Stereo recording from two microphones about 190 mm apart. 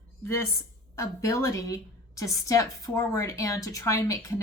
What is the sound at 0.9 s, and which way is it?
A woman's voice, 15° left (ahead or behind).